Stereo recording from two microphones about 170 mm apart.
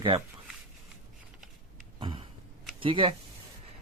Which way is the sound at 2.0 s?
30° right (ahead or behind).